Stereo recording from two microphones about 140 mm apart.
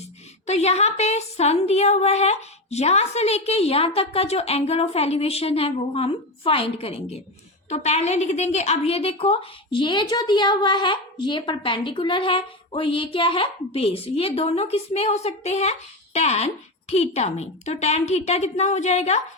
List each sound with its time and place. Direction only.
0.4 s a woman's voice: 50° left (ahead or behind)